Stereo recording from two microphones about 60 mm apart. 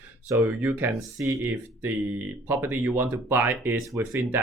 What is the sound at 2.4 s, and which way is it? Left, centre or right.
Speech, right.